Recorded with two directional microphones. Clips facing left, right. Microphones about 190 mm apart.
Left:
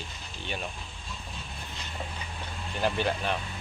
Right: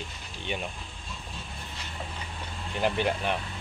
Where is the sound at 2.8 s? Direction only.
20° right (ahead or behind).